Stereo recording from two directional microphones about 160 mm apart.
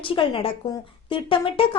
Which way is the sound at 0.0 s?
35° left (ahead or behind).